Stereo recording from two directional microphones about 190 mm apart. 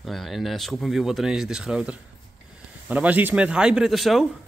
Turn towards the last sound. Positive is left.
turn(degrees=0)  # may be behind; listen again after turning